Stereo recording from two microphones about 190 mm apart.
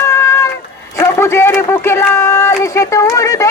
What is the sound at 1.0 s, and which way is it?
Speech, 15° left (ahead or behind).